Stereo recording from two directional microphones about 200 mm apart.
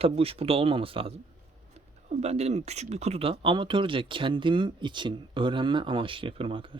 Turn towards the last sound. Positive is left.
turn(degrees=-25)  # may be behind; listen again after turning